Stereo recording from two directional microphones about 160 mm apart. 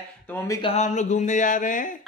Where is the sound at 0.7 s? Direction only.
50° left (ahead or behind).